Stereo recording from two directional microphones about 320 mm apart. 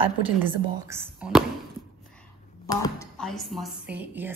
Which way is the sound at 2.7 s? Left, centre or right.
Centre.